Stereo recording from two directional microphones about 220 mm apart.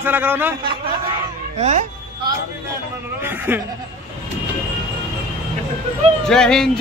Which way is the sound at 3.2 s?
10° right (ahead or behind).